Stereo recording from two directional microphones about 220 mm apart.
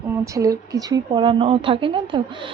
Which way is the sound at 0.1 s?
15° right (ahead or behind).